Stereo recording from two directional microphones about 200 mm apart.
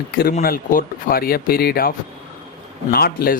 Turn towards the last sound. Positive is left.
turn(degrees=50)  # may be behind; listen again after turning